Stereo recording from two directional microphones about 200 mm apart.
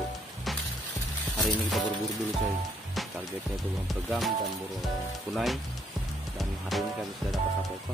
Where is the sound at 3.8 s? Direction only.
Centre (ahead or behind).